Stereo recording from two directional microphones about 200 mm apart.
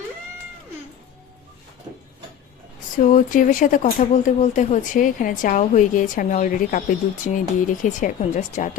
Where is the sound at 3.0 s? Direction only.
40° left (ahead or behind).